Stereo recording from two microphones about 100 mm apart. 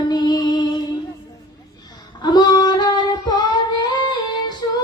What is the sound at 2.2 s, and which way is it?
Female singing, 45° left (ahead or behind).